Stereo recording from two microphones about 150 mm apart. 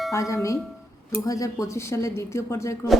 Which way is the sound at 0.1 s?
20° left (ahead or behind).